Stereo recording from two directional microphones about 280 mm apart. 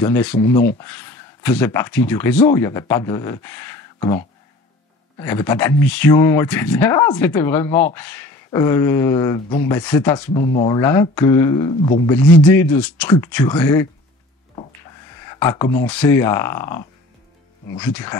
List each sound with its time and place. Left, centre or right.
0.0 s speech: centre
5.2 s speech: centre
10.4 s speech: left
10.8 s speech: centre
15.2 s speech: centre